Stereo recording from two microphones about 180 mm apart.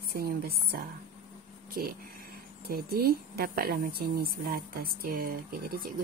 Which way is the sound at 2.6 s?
55° right (ahead or behind).